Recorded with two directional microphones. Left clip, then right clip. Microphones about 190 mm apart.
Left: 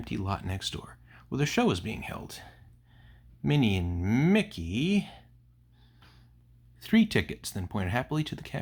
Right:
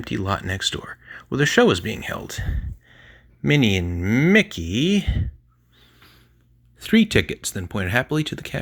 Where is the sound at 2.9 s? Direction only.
20° right (ahead or behind).